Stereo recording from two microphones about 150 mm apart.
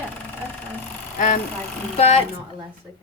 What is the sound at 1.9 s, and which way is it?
Speech, 45° left (ahead or behind).